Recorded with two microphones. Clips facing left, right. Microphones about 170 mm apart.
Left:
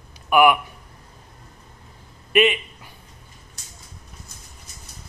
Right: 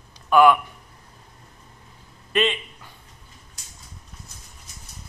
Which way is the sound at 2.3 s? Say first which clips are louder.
Left 4 dB; 10° left (ahead or behind).